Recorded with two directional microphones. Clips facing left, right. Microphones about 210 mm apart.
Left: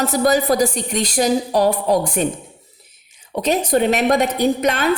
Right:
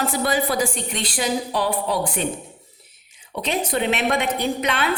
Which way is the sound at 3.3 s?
40° left (ahead or behind).